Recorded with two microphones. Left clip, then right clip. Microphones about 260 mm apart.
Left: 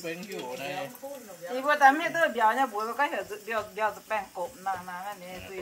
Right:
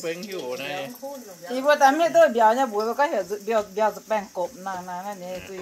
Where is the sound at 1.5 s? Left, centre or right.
Right.